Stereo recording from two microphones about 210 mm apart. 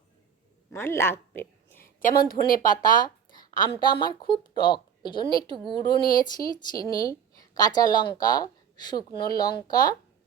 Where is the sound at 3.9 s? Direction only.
20° left (ahead or behind).